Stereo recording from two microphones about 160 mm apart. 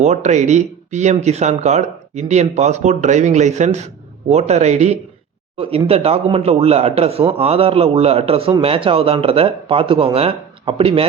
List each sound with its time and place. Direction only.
0.0 s speech: 45° right (ahead or behind)